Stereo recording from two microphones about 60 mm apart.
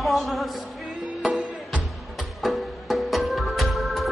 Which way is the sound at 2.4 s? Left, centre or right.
Centre.